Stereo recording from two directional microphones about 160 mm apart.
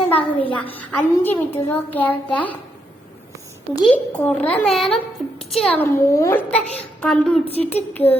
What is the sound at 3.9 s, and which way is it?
A child's voice, 10° left (ahead or behind).